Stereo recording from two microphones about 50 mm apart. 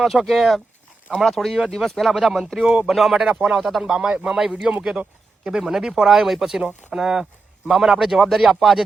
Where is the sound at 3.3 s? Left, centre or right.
Right.